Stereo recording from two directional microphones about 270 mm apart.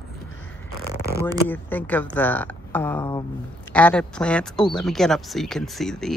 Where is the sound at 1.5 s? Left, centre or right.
Centre.